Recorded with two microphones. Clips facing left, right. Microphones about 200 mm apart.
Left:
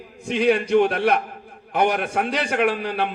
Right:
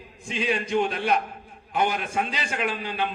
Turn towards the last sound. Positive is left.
turn(degrees=65)  # may be behind; listen again after turning